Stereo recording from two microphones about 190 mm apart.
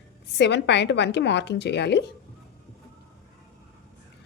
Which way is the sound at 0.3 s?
65° left (ahead or behind).